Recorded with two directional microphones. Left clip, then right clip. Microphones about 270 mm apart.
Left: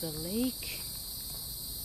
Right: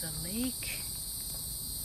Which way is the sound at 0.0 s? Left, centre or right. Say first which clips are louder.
Left 3 dB; centre.